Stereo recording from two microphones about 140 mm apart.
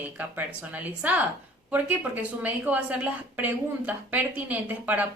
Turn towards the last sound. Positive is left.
turn(degrees=-10)  # may be behind; listen again after turning